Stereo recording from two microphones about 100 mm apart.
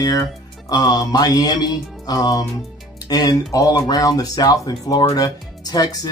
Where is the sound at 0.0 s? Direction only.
40° left (ahead or behind).